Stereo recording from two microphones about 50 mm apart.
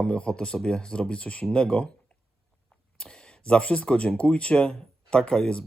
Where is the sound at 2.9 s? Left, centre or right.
Centre.